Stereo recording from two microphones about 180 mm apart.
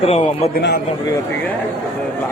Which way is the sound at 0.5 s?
60° left (ahead or behind).